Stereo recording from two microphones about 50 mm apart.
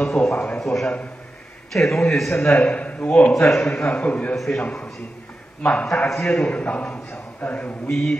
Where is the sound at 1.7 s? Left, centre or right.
Centre.